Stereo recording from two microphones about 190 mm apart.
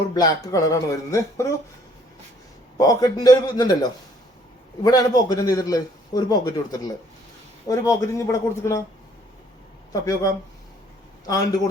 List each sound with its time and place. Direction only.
0.1 s speech: 20° left (ahead or behind)
2.7 s a man's voice: 20° left (ahead or behind)
9.9 s speech: 20° left (ahead or behind)